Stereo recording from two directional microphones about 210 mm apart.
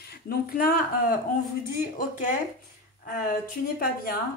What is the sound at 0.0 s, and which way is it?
Speech, 50° left (ahead or behind).